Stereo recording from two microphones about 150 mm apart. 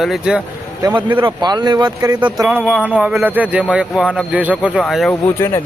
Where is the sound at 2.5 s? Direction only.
10° right (ahead or behind).